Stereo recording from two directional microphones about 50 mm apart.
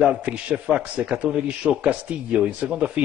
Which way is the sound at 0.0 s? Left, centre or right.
Right.